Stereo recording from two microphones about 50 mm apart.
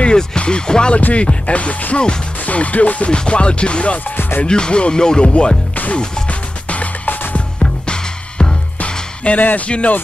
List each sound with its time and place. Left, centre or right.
0.0 s music: centre
6.7 s music: left